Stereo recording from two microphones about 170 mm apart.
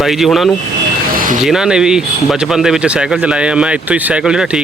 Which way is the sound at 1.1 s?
55° right (ahead or behind).